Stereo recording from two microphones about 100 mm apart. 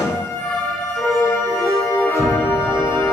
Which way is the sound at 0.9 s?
Centre (ahead or behind).